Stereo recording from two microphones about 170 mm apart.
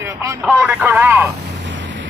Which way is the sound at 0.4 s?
5° right (ahead or behind).